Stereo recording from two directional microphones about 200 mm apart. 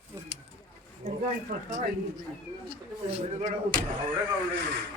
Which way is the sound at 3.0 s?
30° right (ahead or behind).